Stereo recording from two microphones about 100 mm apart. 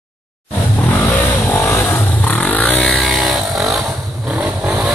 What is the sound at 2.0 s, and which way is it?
Vehicle, 15° left (ahead or behind).